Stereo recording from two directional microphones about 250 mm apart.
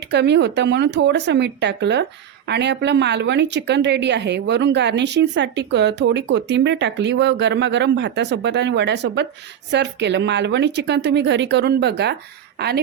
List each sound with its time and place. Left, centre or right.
0.1 s a woman's voice: right